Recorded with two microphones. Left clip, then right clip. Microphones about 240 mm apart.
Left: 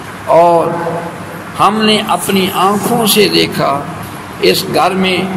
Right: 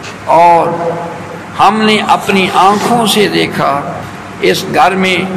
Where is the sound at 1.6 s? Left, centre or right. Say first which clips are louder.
Right 2 dB; left.